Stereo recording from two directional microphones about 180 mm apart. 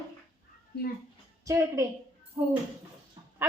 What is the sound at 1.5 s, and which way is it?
Speech, 20° right (ahead or behind).